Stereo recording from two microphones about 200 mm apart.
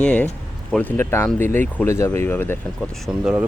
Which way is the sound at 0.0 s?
5° left (ahead or behind).